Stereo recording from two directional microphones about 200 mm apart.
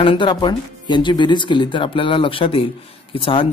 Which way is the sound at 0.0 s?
25° left (ahead or behind).